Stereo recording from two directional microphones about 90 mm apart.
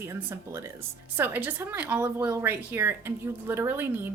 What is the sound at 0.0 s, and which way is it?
A woman's voice, 30° right (ahead or behind).